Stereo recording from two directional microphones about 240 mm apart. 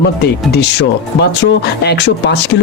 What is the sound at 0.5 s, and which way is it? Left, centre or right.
Speech, left.